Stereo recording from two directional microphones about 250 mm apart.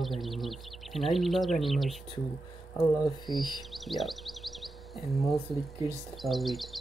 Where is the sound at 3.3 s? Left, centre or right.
Centre.